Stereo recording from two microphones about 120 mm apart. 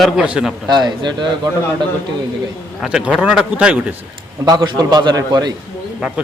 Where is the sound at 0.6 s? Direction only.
35° right (ahead or behind).